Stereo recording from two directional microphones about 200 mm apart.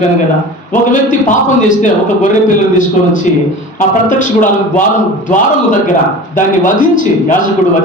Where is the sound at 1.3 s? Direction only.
40° left (ahead or behind).